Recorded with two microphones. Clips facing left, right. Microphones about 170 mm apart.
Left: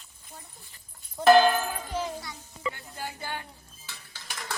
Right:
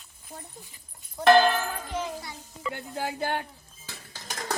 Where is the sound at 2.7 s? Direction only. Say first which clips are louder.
Right 7 dB; 65° right (ahead or behind).